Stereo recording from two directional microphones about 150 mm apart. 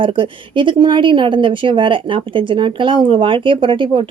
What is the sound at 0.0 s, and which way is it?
Speech, 35° right (ahead or behind).